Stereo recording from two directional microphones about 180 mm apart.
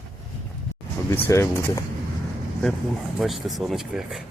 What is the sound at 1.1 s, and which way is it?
Speech, 15° left (ahead or behind).